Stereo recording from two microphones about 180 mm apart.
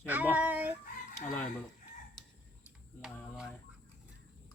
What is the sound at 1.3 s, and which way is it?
Chicken, 5° left (ahead or behind).